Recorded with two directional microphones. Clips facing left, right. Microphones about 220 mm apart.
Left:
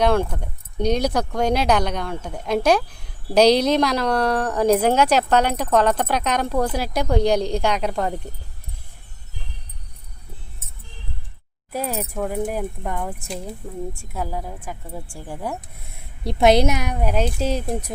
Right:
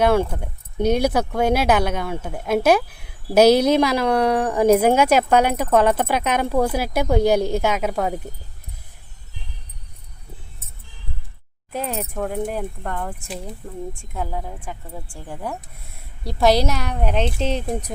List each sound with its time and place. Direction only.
0.0 s speech: 5° right (ahead or behind)
11.7 s speech: 5° left (ahead or behind)
16.2 s speech: 20° left (ahead or behind); by 17.8 s 5° left (ahead or behind)